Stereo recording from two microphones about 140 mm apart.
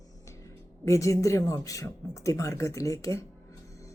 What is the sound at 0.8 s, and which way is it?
A woman's voice, 20° left (ahead or behind).